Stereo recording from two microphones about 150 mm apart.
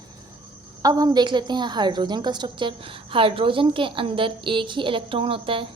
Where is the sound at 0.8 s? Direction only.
25° right (ahead or behind).